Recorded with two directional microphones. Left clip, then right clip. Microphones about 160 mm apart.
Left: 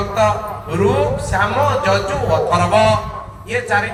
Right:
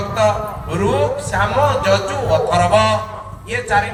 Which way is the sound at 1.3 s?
35° right (ahead or behind).